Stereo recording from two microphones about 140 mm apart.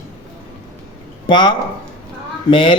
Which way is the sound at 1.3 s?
35° left (ahead or behind).